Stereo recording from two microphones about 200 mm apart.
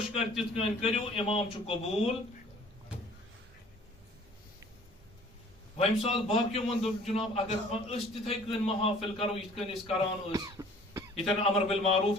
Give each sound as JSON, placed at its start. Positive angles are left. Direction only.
{"t": 0.5, "sound": "a man's voice", "side_deg": 30}
{"t": 5.7, "sound": "a man's voice", "side_deg": 30}
{"t": 10.3, "sound": "cough", "side_deg": -20}
{"t": 11.1, "sound": "a man's voice", "side_deg": 30}